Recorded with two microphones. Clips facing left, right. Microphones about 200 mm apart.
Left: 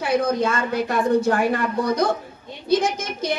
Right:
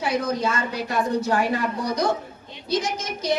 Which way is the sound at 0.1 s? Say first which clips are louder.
Left 5 dB; 55° left (ahead or behind).